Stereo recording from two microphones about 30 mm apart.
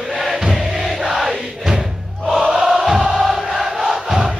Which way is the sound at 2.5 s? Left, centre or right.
Centre.